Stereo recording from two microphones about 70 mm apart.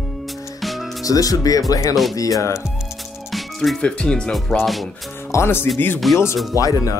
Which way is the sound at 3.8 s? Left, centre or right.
Centre.